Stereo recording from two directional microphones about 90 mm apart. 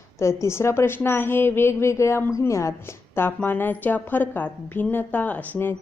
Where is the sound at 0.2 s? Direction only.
30° left (ahead or behind).